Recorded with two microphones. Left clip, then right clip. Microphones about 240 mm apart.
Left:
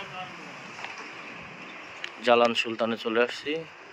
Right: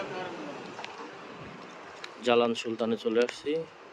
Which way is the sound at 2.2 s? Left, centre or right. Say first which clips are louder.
Left 4 dB; centre.